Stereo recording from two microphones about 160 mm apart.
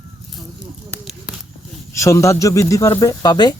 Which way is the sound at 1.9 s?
20° left (ahead or behind).